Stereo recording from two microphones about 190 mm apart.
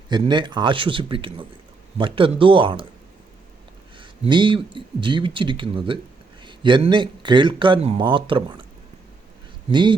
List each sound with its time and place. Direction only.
0.1 s speech: 25° right (ahead or behind)
3.9 s speech: 25° right (ahead or behind)
9.6 s speech: 25° right (ahead or behind)